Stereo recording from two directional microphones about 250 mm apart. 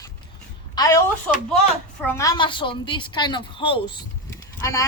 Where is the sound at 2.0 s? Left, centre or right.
Centre.